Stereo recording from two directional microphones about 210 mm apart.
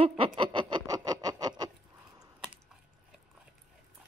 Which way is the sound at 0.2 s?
25° right (ahead or behind).